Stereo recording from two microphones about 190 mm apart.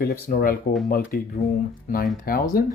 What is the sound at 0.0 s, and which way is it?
Speech, 50° left (ahead or behind).